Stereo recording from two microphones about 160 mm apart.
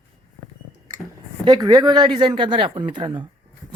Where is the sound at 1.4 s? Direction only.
30° right (ahead or behind).